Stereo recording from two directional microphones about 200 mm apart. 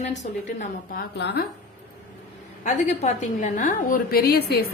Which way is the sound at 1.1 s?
60° left (ahead or behind).